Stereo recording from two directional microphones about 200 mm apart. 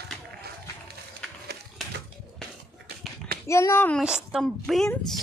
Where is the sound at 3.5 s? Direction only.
15° left (ahead or behind).